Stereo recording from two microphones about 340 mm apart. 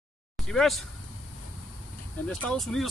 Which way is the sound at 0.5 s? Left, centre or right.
Centre.